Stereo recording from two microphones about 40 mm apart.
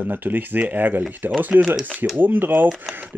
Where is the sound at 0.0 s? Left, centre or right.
Right.